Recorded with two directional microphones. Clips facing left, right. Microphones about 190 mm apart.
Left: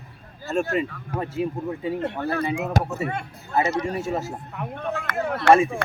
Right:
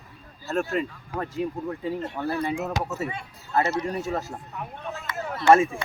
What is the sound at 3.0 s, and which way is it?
Speech, 55° left (ahead or behind).